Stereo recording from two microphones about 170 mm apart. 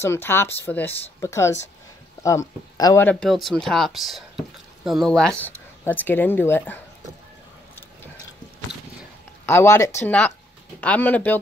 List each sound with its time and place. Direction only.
0.0 s speech: 15° left (ahead or behind)
9.5 s speech: 15° left (ahead or behind)